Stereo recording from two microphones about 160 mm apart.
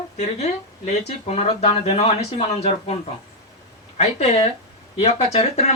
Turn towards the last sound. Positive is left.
turn(degrees=40)  # may be behind; listen again after turning